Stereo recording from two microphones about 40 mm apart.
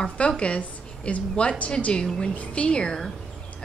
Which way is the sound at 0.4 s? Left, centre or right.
Left.